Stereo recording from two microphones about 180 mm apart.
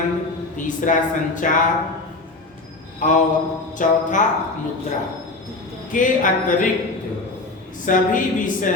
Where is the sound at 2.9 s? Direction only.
45° left (ahead or behind).